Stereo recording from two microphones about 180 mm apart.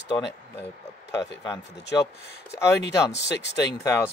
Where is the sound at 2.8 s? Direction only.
70° left (ahead or behind).